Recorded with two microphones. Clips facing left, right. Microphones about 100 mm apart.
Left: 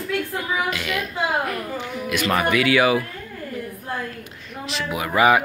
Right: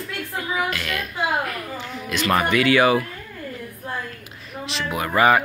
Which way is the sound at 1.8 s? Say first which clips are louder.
Left 2 dB; 10° left (ahead or behind).